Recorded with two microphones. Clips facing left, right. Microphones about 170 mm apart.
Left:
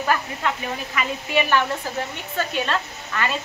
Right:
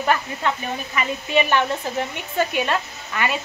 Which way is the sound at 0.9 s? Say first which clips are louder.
Right 2 dB; 20° right (ahead or behind).